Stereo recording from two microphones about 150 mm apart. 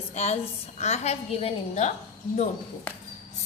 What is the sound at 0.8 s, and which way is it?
A woman's voice, 50° left (ahead or behind).